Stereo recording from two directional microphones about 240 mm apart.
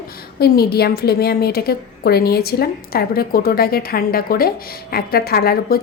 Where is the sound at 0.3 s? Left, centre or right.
Left.